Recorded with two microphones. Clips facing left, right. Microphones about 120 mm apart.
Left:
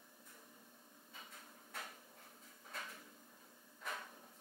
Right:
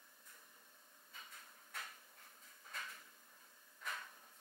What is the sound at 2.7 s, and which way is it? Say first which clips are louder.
Drawer open or close: left 1 dB; 15° left (ahead or behind).